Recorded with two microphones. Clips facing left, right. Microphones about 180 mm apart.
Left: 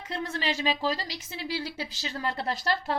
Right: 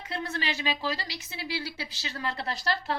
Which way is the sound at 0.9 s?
45° left (ahead or behind).